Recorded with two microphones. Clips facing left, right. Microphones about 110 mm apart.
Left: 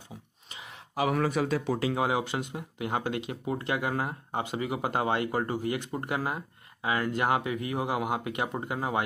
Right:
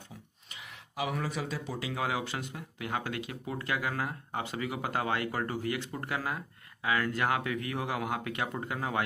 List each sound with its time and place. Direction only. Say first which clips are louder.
0.5 s a sound: left 3 dB; 25° left (ahead or behind)
0.9 s speech: left 7 dB; 50° left (ahead or behind)
1.2 s speech: left 8 dB; 60° left (ahead or behind)
2.0 s speech: left 5 dB; 25° left (ahead or behind)